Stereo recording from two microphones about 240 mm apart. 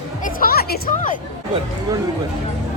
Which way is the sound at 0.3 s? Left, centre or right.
Left.